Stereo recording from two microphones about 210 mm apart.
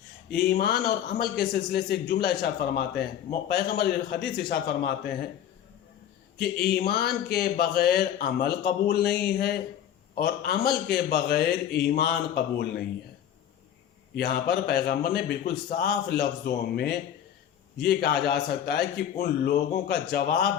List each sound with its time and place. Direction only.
0.3 s speech: 50° left (ahead or behind)
6.4 s speech: 50° left (ahead or behind)
14.2 s speech: 45° left (ahead or behind)